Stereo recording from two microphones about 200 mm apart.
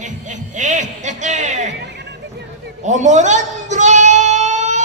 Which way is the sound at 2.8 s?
35° right (ahead or behind).